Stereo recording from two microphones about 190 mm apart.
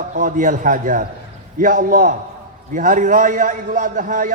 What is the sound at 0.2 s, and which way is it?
A man's voice, 45° right (ahead or behind).